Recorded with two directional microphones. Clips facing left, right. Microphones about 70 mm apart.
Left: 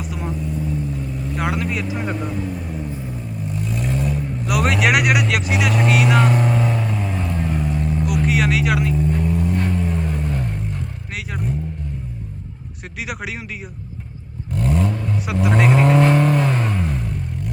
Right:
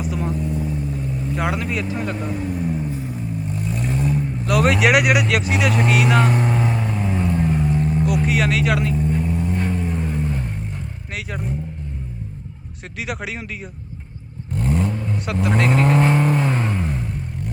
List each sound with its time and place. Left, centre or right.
0.0 s vehicle: centre
2.1 s speech: centre
2.4 s vehicle: centre
4.4 s speech: centre
6.8 s music: centre
7.9 s speech: centre
9.0 s vehicle: centre
11.1 s speech: centre
13.0 s speech: centre
14.5 s vehicle: right
14.8 s vehicle: centre
15.3 s speech: centre
16.0 s vehicle: centre